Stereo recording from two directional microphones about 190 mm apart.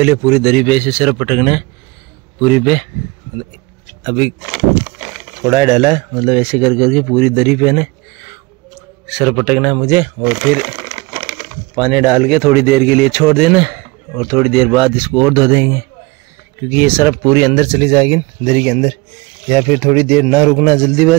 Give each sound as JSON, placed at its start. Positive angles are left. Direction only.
{"t": 0.0, "sound": "speech", "side_deg": -10}
{"t": 4.0, "sound": "speech", "side_deg": -5}
{"t": 9.0, "sound": "speech", "side_deg": 0}
{"t": 11.7, "sound": "speech", "side_deg": 0}
{"t": 18.4, "sound": "speech", "side_deg": -10}